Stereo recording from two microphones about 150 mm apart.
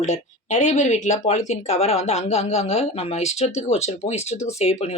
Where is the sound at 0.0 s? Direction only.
50° left (ahead or behind).